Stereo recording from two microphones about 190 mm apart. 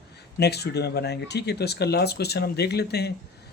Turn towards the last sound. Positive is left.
turn(degrees=60)  # may be behind; listen again after turning